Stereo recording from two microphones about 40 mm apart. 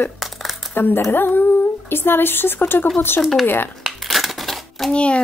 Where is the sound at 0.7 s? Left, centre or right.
Left.